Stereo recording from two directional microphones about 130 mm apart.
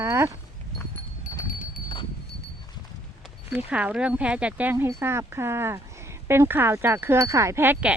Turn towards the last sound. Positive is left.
turn(degrees=-15)  # may be behind; listen again after turning